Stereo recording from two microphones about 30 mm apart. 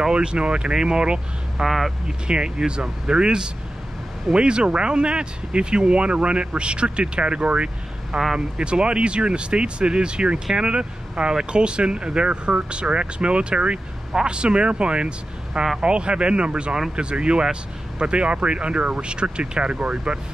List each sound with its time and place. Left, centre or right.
0.1 s speech: right
1.6 s speech: centre
2.0 s speech: right